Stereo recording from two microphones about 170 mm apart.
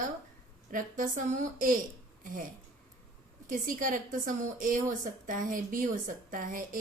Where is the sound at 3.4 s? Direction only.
50° right (ahead or behind).